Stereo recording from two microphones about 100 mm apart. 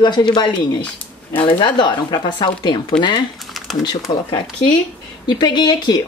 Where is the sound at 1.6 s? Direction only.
50° left (ahead or behind).